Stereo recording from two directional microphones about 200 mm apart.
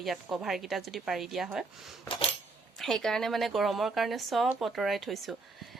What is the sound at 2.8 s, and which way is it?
A woman's voice, centre (ahead or behind).